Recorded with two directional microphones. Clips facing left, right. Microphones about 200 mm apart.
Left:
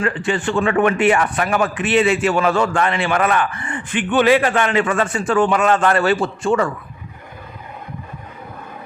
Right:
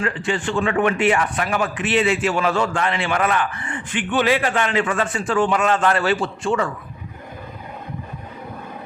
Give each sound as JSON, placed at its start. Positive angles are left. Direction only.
{"t": 0.0, "sound": "a man's voice", "side_deg": 55}